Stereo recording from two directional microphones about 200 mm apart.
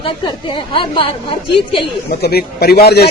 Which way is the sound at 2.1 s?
50° left (ahead or behind).